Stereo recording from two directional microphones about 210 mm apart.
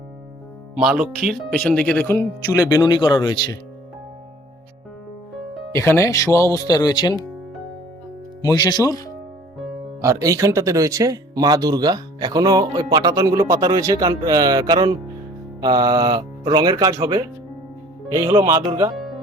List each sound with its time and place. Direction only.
0.8 s speech: 5° right (ahead or behind); by 3.6 s 20° left (ahead or behind)
5.7 s speech: 10° left (ahead or behind)
8.4 s speech: 15° left (ahead or behind)
10.0 s speech: 15° right (ahead or behind)